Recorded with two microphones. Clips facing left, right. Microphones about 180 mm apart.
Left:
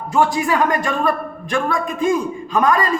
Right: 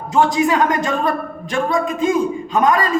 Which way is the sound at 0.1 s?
20° right (ahead or behind).